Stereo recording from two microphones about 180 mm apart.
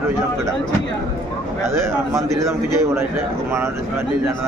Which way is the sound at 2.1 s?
15° right (ahead or behind).